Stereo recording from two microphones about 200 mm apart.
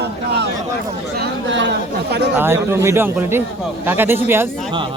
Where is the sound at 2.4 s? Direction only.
10° right (ahead or behind).